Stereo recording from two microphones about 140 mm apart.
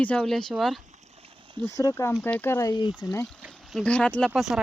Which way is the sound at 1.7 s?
20° left (ahead or behind).